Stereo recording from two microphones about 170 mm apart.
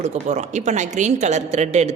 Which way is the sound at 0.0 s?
40° right (ahead or behind).